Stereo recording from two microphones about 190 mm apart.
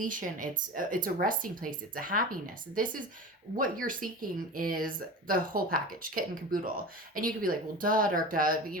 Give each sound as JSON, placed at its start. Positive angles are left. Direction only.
{"t": 0.0, "sound": "speech", "side_deg": -45}